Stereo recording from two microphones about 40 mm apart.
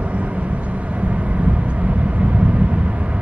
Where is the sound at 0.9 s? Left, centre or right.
Right.